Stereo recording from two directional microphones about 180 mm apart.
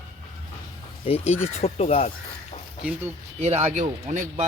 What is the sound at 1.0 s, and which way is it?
Speech, 35° left (ahead or behind).